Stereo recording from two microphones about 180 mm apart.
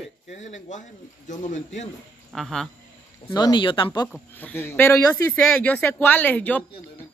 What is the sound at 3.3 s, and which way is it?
Speech, 25° left (ahead or behind).